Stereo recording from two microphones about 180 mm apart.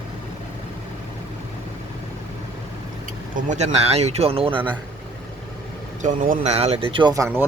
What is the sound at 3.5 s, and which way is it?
Speech, 35° right (ahead or behind).